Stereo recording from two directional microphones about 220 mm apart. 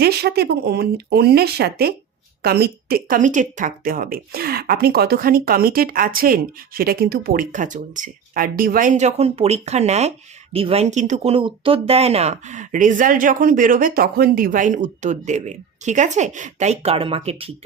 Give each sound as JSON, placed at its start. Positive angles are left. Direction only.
{"t": 0.0, "sound": "speech", "side_deg": -45}